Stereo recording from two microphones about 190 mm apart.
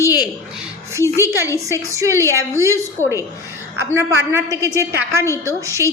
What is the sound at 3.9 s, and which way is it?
A woman's voice, 15° right (ahead or behind).